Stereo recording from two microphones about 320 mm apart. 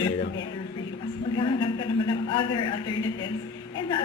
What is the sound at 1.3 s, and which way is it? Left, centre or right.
A man's voice, centre.